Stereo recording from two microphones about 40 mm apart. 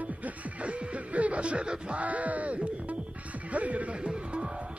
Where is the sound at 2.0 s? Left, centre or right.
Right.